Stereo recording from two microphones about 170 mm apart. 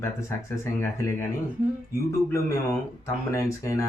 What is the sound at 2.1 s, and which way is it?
Speech, 20° left (ahead or behind).